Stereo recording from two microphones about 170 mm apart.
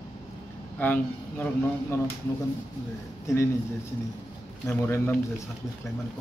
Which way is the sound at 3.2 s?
15° left (ahead or behind).